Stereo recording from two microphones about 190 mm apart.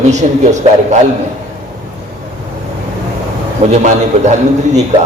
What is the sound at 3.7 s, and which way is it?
A man's voice, 35° right (ahead or behind).